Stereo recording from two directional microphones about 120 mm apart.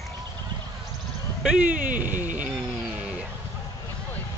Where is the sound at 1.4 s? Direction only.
10° right (ahead or behind).